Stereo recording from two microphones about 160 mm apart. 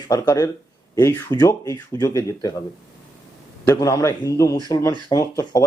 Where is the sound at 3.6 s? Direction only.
20° left (ahead or behind).